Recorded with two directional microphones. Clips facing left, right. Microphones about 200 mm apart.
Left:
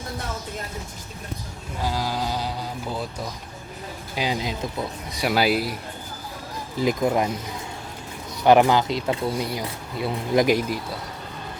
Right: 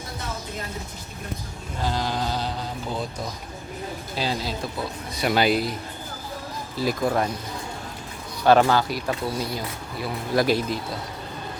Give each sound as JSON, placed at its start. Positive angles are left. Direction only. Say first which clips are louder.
{"t": 1.8, "sound": "a sound", "louder": "even", "side_deg": 10}
{"t": 4.1, "sound": "a man's voice", "louder": "left 2 dB", "side_deg": 15}
{"t": 6.7, "sound": "speech", "louder": "left 2 dB", "side_deg": 20}
{"t": 8.4, "sound": "speech", "louder": "left 1 dB", "side_deg": 15}